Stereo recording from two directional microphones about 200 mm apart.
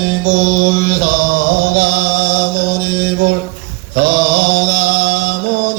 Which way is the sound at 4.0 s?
60° right (ahead or behind).